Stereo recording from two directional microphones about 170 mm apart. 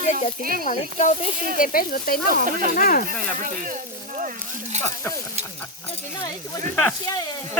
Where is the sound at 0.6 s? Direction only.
45° left (ahead or behind).